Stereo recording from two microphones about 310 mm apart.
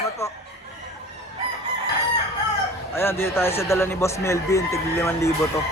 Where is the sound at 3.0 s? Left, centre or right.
Centre.